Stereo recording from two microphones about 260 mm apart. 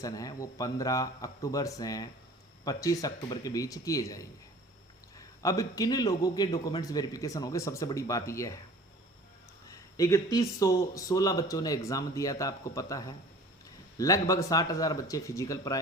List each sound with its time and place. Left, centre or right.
0.0 s speech: centre
9.6 s speech: centre